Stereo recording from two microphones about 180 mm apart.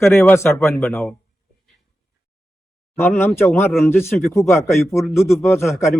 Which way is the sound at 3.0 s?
10° left (ahead or behind).